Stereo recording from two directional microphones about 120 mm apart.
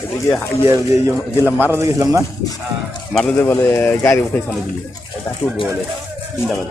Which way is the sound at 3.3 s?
20° left (ahead or behind).